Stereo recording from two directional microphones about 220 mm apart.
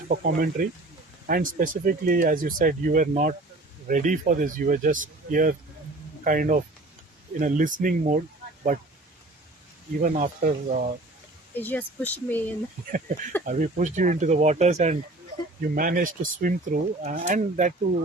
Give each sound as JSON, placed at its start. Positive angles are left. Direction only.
{"t": 0.1, "sound": "speech", "side_deg": -40}
{"t": 10.0, "sound": "speech", "side_deg": -35}
{"t": 11.5, "sound": "speech", "side_deg": 10}
{"t": 12.9, "sound": "speech", "side_deg": -35}